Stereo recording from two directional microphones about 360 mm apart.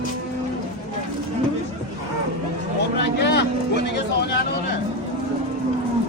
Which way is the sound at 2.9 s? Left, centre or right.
Left.